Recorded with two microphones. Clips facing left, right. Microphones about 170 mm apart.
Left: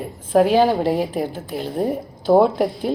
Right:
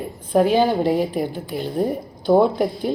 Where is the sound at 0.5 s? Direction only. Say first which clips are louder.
Left 1 dB; 35° left (ahead or behind).